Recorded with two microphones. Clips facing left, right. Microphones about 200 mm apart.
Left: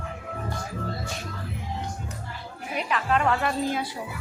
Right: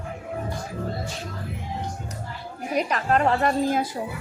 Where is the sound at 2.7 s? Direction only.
40° right (ahead or behind).